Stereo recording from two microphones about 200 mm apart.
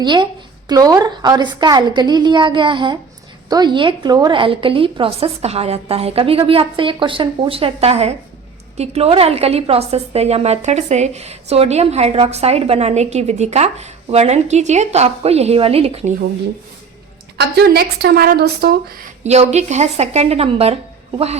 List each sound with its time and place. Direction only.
0.0 s a woman's voice: 20° right (ahead or behind)
17.4 s a woman's voice: 55° right (ahead or behind)
19.2 s a woman's voice: 35° right (ahead or behind)